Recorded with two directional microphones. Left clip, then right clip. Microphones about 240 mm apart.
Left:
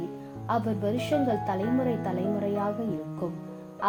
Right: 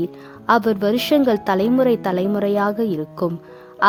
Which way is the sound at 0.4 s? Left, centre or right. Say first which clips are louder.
Right 12 dB; right.